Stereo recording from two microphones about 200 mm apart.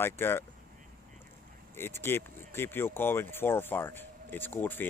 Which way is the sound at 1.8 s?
10° left (ahead or behind).